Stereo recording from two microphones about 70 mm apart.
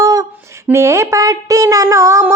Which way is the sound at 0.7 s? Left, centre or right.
Right.